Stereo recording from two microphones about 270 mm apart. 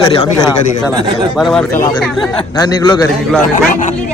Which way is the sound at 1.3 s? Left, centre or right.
Centre.